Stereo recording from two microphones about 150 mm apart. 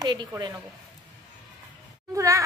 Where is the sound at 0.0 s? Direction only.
30° right (ahead or behind).